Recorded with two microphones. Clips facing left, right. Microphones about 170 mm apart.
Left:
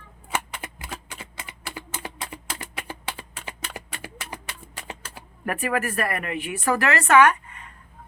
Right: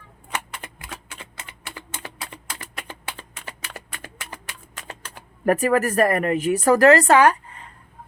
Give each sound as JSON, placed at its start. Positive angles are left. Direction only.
{"t": 0.3, "sound": "typing", "side_deg": 10}
{"t": 4.9, "sound": "a sound", "side_deg": 10}
{"t": 5.5, "sound": "speech", "side_deg": -40}